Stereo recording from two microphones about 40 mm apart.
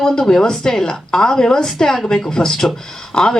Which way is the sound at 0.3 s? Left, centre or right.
Centre.